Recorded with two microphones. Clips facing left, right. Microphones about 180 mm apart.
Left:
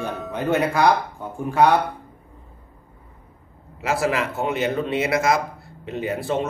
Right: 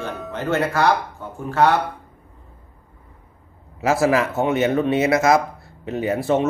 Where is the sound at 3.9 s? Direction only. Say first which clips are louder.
Right 4 dB; 25° right (ahead or behind).